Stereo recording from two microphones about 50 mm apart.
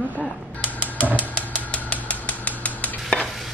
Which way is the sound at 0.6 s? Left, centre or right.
Right.